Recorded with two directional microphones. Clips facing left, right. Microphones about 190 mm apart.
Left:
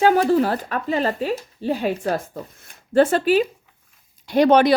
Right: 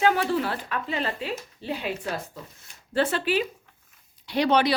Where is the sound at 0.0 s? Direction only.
40° left (ahead or behind).